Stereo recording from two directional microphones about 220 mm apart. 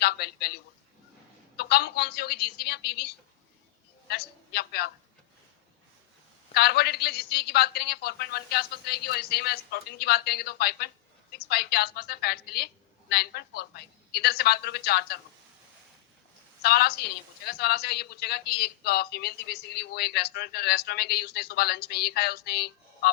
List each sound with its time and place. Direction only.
0.0 s a woman's voice: 45° left (ahead or behind)
4.1 s a woman's voice: 45° left (ahead or behind)
6.5 s a woman's voice: 45° left (ahead or behind)
16.6 s a woman's voice: 45° left (ahead or behind)